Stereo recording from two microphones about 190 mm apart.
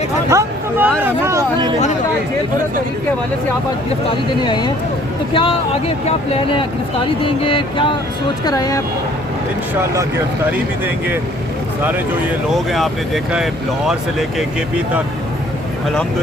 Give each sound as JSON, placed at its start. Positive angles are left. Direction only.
{"t": 0.3, "sound": "speech", "side_deg": -15}
{"t": 4.4, "sound": "a sound", "side_deg": 20}
{"t": 12.5, "sound": "speech", "side_deg": 0}